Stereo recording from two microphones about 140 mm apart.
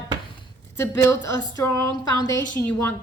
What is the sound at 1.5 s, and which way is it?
Speech, 25° left (ahead or behind).